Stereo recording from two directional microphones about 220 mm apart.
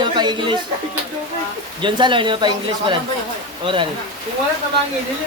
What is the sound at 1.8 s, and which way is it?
Speech, 20° right (ahead or behind).